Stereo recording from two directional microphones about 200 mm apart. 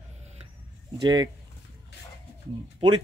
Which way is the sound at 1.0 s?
20° right (ahead or behind).